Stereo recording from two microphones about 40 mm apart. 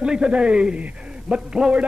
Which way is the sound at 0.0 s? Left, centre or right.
Right.